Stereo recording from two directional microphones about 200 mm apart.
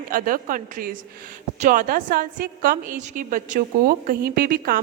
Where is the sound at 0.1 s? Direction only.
45° right (ahead or behind).